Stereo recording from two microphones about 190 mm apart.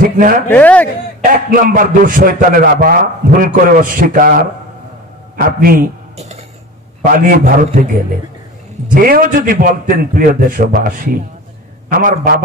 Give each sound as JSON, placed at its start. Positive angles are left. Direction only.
{"t": 0.0, "sound": "a sound", "side_deg": -50}
{"t": 0.5, "sound": "speech", "side_deg": 10}
{"t": 1.2, "sound": "a man's voice", "side_deg": -45}
{"t": 5.6, "sound": "a man's voice", "side_deg": -50}